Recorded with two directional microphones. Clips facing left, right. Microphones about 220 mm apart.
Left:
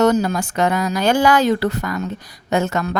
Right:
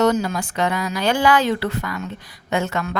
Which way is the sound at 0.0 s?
40° left (ahead or behind).